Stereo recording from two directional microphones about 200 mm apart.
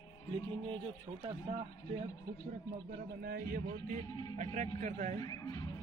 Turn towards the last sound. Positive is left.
turn(degrees=-35)  # may be behind; listen again after turning